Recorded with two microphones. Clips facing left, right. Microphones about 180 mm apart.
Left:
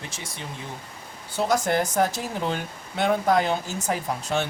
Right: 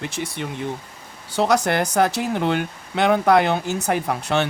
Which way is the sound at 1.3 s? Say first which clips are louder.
Right 4 dB; 75° right (ahead or behind).